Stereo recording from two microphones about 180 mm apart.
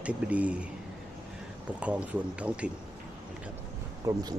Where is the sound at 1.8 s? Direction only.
5° right (ahead or behind).